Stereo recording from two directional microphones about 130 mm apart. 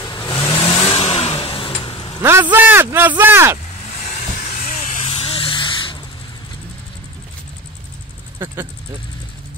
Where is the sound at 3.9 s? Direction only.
60° left (ahead or behind).